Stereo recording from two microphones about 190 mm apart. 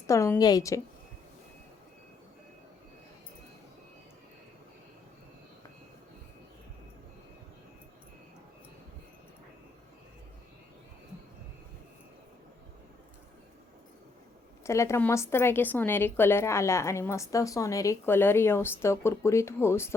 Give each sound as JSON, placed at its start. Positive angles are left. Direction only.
{"t": 0.1, "sound": "a woman's voice", "side_deg": 15}
{"t": 14.6, "sound": "a woman's voice", "side_deg": 15}